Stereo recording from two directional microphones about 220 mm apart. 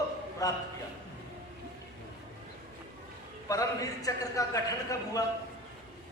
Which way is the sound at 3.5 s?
15° left (ahead or behind).